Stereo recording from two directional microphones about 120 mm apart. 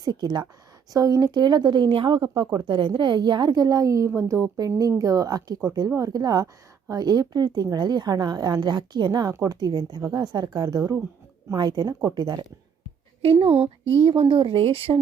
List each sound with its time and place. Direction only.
0.0 s a woman's voice: 35° right (ahead or behind)
13.4 s speech: 55° right (ahead or behind)
14.0 s speech: 45° right (ahead or behind)